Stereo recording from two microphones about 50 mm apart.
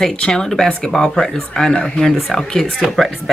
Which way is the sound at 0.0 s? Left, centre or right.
Centre.